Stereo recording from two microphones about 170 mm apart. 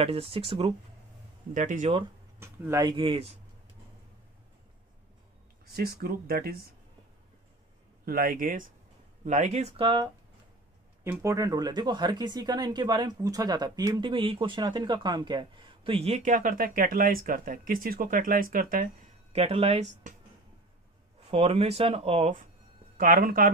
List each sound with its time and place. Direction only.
0.0 s speech: 35° right (ahead or behind)
1.5 s speech: 45° right (ahead or behind)
2.3 s speech: 15° right (ahead or behind)
2.8 s speech: 30° right (ahead or behind)
5.7 s speech: 65° right (ahead or behind)
8.0 s speech: 60° right (ahead or behind); by 16.2 s 35° right (ahead or behind)
16.2 s speech: 50° right (ahead or behind)
19.3 s speech: 35° right (ahead or behind)
21.3 s speech: 35° right (ahead or behind)
22.9 s speech: 55° right (ahead or behind)